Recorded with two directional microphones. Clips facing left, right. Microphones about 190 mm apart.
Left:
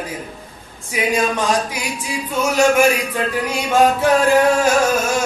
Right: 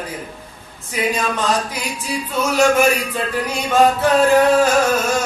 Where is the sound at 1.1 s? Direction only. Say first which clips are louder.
Left 3 dB; 10° left (ahead or behind).